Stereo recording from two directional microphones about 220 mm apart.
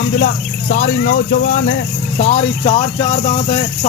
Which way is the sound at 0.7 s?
40° left (ahead or behind).